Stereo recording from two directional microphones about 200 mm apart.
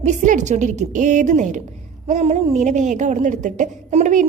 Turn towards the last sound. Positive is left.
turn(degrees=-35)  # may be behind; listen again after turning